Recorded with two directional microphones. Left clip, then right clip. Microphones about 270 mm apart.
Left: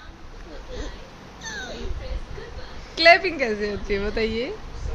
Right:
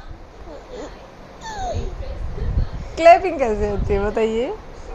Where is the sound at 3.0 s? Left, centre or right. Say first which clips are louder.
Right 4 dB; centre.